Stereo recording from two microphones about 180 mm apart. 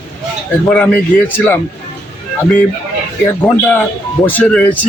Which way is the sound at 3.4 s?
10° left (ahead or behind).